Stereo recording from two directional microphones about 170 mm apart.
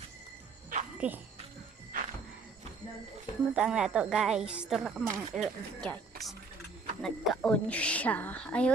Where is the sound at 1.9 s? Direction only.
55° right (ahead or behind).